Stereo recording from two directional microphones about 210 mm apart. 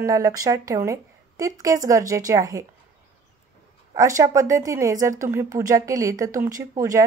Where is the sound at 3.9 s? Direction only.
15° right (ahead or behind).